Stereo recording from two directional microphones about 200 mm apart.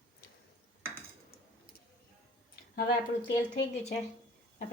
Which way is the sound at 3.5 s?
60° left (ahead or behind).